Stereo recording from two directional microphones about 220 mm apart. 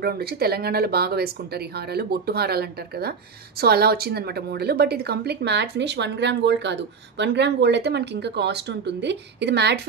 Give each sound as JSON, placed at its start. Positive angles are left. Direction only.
{"t": 0.0, "sound": "a woman's voice", "side_deg": -45}